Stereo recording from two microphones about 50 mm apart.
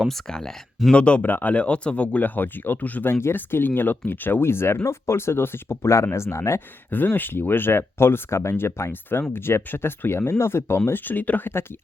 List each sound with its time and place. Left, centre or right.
0.3 s speech: centre
0.9 s speech: left
1.3 s speech: left
1.5 s speech: left
3.1 s speech: left
3.3 s speech: left
6.9 s speech: left